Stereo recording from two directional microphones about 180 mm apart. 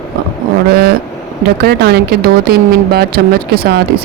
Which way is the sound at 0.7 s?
60° right (ahead or behind).